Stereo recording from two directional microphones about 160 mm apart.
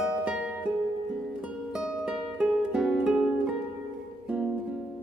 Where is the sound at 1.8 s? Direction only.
5° right (ahead or behind).